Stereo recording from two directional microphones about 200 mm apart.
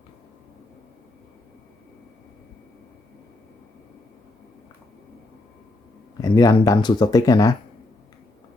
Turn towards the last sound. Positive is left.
turn(degrees=20)  # may be behind; listen again after turning